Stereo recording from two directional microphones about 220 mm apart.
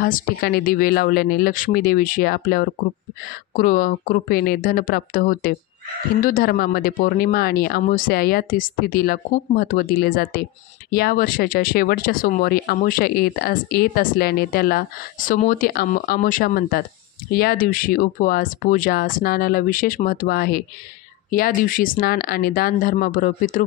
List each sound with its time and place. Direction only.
0.0 s speech: 40° left (ahead or behind)